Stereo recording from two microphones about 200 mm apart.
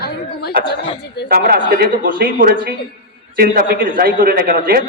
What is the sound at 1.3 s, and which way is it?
A man's voice, 50° right (ahead or behind).